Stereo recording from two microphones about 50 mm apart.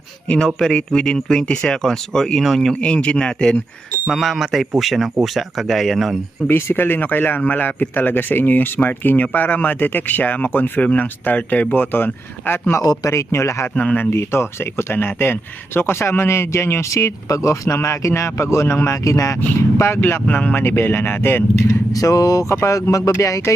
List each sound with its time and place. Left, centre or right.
0.3 s speech: centre
2.8 s speech: left
4.1 s speech: centre
6.5 s speech: left
11.7 s speech: left
12.7 s speech: left
13.9 s a man's voice: left
17.7 s speech: left
19.5 s speech: left
20.0 s speech: left
20.2 s speech: left
20.6 s speech: left
22.4 s speech: left